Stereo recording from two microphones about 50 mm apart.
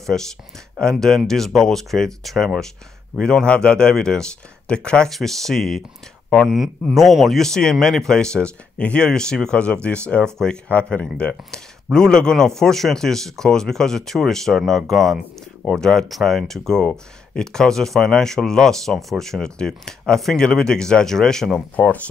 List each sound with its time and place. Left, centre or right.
0.7 s speech: centre
5.1 s speech: centre
6.4 s a man's voice: centre
16.8 s speech: centre
21.8 s speech: left